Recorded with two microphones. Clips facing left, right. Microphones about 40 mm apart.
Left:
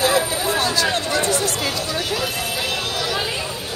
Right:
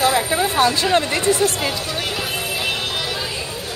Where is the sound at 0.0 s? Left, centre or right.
Right.